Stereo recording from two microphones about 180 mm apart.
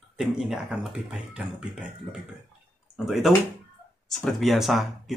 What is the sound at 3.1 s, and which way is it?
Speech, centre (ahead or behind).